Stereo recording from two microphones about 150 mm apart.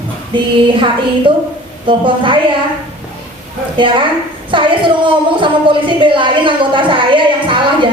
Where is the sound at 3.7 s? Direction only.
35° right (ahead or behind).